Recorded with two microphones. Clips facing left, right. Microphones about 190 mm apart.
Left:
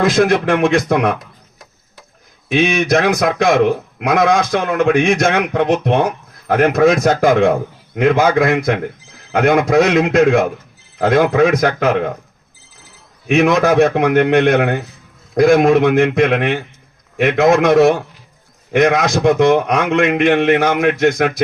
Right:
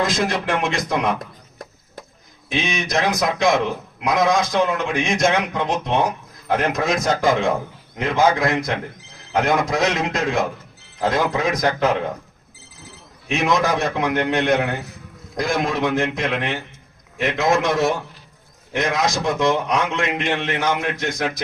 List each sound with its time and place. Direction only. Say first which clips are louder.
0.0 s a man's voice: left 8 dB; 60° left (ahead or behind)
2.5 s a man's voice: left 9 dB; 60° left (ahead or behind)
13.2 s a man's voice: left 7 dB; 60° left (ahead or behind)